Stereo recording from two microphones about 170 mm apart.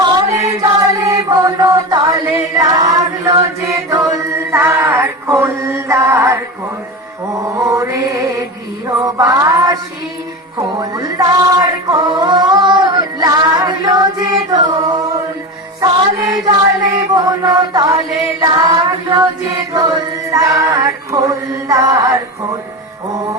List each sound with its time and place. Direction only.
0.0 s chant: 20° right (ahead or behind)
7.5 s mantra: 15° right (ahead or behind)
9.0 s music: 20° right (ahead or behind)
10.8 s a capella: 20° right (ahead or behind)
14.5 s music: 20° right (ahead or behind)
16.5 s chant: 20° right (ahead or behind)